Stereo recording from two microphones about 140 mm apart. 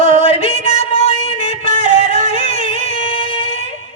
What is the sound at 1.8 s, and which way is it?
Yodeling, 60° right (ahead or behind).